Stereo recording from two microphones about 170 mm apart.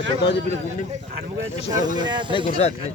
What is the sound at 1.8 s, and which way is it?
Speech, 25° right (ahead or behind).